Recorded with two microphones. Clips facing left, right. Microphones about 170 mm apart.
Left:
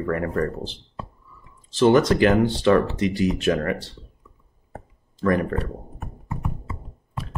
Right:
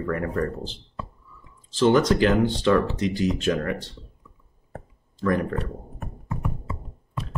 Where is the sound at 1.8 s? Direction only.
60° left (ahead or behind).